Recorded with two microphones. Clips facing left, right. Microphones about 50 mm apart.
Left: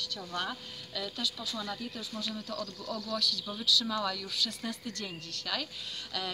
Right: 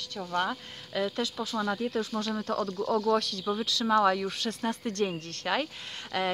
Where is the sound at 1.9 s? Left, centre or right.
Right.